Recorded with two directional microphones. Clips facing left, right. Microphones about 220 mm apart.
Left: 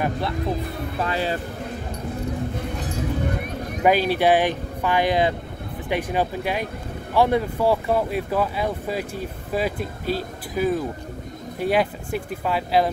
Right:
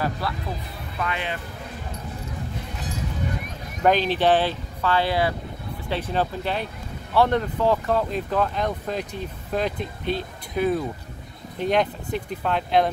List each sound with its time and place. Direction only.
0.9 s speech: 35° left (ahead or behind)
3.8 s speech: 10° left (ahead or behind)